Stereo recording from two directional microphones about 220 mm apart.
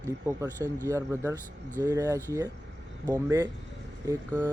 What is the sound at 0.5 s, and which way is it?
Speech, 10° left (ahead or behind).